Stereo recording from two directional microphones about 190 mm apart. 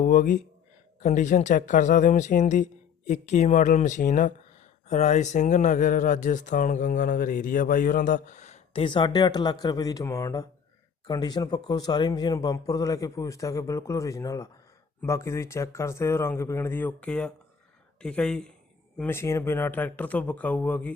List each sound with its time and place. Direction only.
0.0 s speech: 45° left (ahead or behind); by 20.9 s 5° left (ahead or behind)